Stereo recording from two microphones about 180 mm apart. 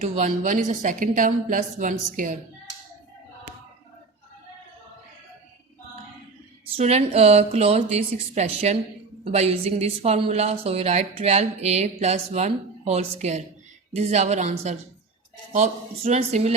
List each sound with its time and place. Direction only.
0.0 s a woman's voice: 45° right (ahead or behind)
6.7 s speech: 35° right (ahead or behind)